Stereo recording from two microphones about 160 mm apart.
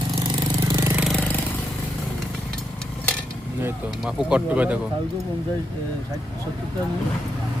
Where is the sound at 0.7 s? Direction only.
20° right (ahead or behind).